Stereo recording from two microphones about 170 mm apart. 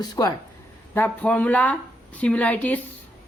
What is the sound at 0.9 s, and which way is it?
Speech, 10° left (ahead or behind).